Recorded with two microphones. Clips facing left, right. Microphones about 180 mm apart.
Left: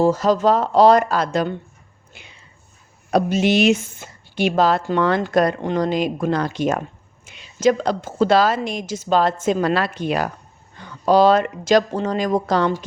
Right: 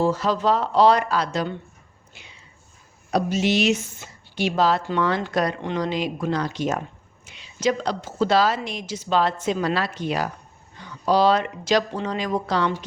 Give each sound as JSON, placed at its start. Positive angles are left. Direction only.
{"t": 0.0, "sound": "a woman's voice", "side_deg": 45}